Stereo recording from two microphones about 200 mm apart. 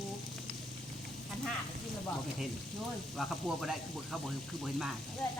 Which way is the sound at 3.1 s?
Centre (ahead or behind).